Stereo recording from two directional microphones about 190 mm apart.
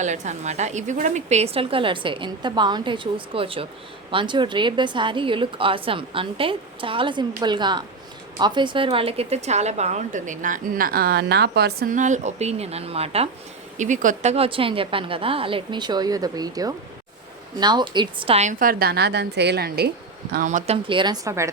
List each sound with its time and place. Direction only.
0.0 s a woman's voice: 40° right (ahead or behind); by 19.9 s 55° right (ahead or behind)
20.3 s a woman's voice: 40° right (ahead or behind)
20.8 s a woman's voice: 25° right (ahead or behind)